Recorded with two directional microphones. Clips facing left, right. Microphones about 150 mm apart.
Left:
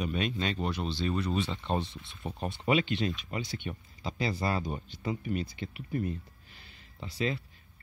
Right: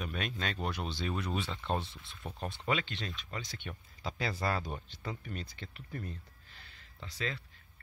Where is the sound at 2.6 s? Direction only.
15° left (ahead or behind).